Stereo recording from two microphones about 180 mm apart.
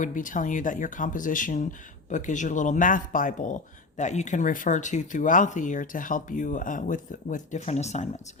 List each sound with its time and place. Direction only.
0.0 s speech: 45° left (ahead or behind)